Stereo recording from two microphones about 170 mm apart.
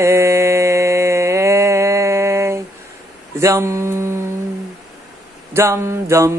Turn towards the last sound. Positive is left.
turn(degrees=-15)  # may be behind; listen again after turning